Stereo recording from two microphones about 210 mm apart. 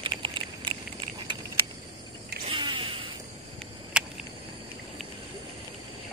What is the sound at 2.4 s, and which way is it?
Vehicle, 25° right (ahead or behind).